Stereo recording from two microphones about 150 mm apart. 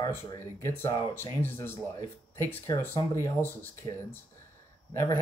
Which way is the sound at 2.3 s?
15° left (ahead or behind).